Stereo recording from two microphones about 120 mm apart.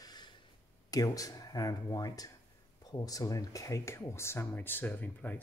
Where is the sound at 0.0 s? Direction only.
35° left (ahead or behind).